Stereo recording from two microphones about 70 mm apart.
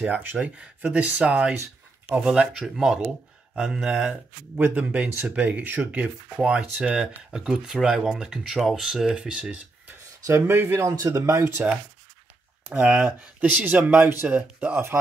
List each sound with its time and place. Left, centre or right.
0.0 s speech: right
4.6 s speech: right
10.3 s speech: right
11.0 s speech: right
12.7 s speech: centre; by 15.0 s right